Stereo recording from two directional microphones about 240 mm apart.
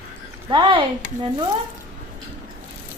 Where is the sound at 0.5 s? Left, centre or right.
Right.